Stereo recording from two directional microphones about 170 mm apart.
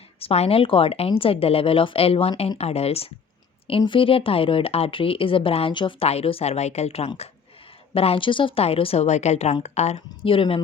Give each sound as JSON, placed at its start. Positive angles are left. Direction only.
{"t": 0.2, "sound": "speech", "side_deg": 35}